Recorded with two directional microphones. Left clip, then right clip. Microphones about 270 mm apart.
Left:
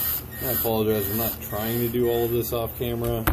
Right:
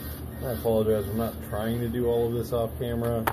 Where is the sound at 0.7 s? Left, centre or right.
Left.